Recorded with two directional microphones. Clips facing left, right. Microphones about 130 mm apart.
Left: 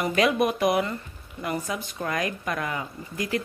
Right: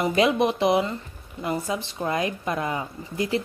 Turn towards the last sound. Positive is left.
turn(degrees=-25)  # may be behind; listen again after turning